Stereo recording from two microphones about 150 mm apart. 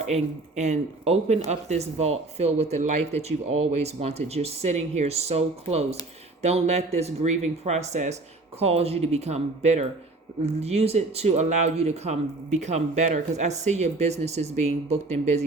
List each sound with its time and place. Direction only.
0.1 s speech: 50° right (ahead or behind)